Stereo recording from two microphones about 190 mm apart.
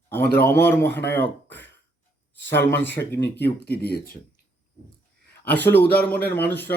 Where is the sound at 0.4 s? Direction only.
10° left (ahead or behind).